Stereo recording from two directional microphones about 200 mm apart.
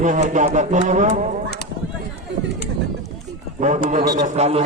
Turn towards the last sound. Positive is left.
turn(degrees=-35)  # may be behind; listen again after turning